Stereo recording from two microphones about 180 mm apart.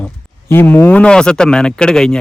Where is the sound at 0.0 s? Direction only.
10° left (ahead or behind).